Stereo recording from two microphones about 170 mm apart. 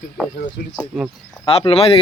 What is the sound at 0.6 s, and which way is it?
Speech, 60° left (ahead or behind).